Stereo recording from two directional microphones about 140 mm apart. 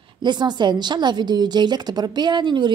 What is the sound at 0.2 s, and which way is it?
A woman's voice, 30° right (ahead or behind).